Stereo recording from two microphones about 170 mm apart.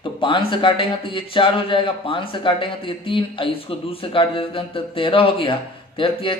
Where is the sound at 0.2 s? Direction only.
30° left (ahead or behind).